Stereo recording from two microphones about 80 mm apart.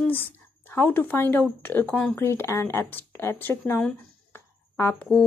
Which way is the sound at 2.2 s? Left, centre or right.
Left.